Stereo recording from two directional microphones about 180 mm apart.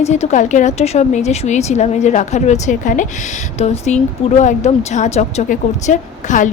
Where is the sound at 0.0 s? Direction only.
40° left (ahead or behind).